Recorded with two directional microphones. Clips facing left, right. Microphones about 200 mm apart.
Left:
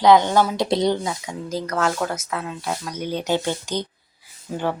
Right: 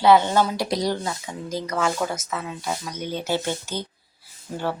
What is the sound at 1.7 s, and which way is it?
Speech, 5° right (ahead or behind).